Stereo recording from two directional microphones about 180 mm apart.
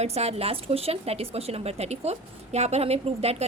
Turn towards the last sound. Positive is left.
turn(degrees=-35)  # may be behind; listen again after turning